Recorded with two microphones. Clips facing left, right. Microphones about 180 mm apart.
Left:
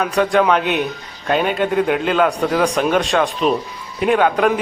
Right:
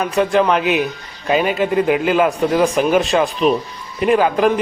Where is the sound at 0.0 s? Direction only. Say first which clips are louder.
Even; centre (ahead or behind).